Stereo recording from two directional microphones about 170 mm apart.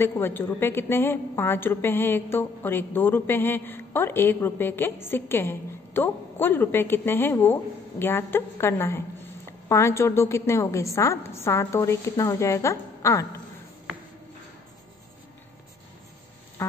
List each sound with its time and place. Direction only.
0.0 s a woman's voice: 15° left (ahead or behind)